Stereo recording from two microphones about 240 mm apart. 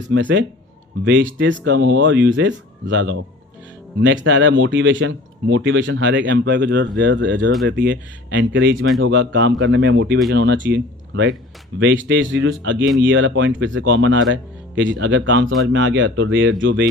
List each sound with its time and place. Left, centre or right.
0.0 s speech: right